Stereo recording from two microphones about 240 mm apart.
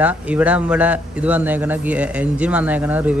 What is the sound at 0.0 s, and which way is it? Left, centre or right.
A man's voice, centre.